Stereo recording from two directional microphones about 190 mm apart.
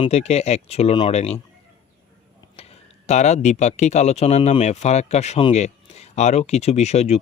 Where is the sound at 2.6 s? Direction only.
35° left (ahead or behind).